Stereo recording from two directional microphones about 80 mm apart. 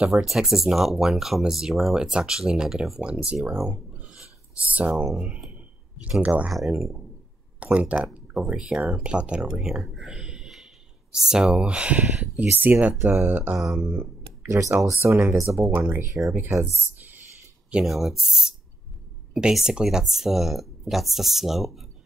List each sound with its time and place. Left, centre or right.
0.0 s speech: centre
3.7 s a sound: centre
5.0 s speech: centre
5.5 s clicking: centre
6.2 s speech: centre
6.5 s speech: centre
7.6 s speech: centre
9.5 s speech: centre
9.9 s a sound: centre
12.4 s speech: right
13.7 s a sound: centre
14.5 s speech: right
15.6 s speech: right
17.8 s speech: centre